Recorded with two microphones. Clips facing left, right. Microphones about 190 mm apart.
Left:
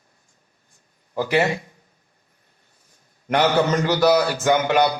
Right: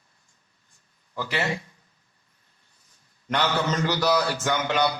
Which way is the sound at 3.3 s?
50° left (ahead or behind).